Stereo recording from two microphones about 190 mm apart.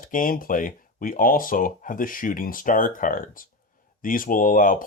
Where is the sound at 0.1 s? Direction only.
45° left (ahead or behind).